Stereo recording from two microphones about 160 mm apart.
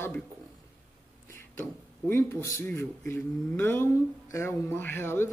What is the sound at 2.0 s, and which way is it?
Speech, 15° left (ahead or behind).